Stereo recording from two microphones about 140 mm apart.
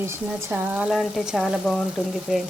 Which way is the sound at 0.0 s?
20° right (ahead or behind).